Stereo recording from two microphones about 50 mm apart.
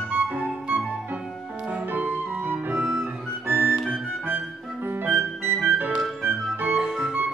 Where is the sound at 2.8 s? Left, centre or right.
Centre.